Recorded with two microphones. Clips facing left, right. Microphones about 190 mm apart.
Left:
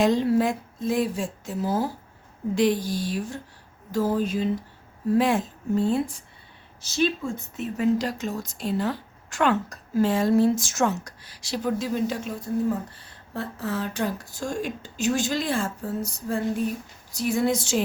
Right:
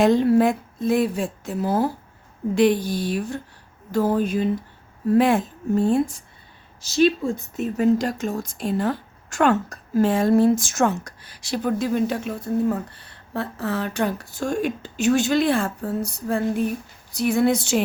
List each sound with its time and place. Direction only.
0.0 s a woman's voice: 55° right (ahead or behind)
7.3 s speech: 40° right (ahead or behind); by 17.8 s 65° right (ahead or behind)